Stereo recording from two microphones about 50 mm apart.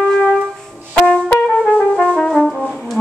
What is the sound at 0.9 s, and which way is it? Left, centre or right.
Brass instrument, left.